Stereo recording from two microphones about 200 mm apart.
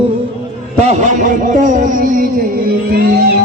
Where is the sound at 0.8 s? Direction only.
35° right (ahead or behind).